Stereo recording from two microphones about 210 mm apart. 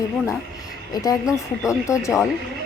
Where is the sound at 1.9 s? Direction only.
15° left (ahead or behind).